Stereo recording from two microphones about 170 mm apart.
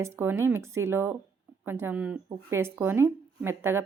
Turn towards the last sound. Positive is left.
turn(degrees=-15)  # may be behind; listen again after turning